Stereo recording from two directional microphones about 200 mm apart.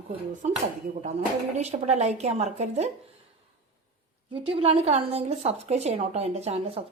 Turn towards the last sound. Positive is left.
turn(degrees=-30)  # may be behind; listen again after turning